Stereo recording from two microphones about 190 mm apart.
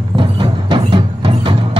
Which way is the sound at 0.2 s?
25° right (ahead or behind).